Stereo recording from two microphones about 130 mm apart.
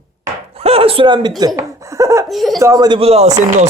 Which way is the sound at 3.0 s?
50° right (ahead or behind).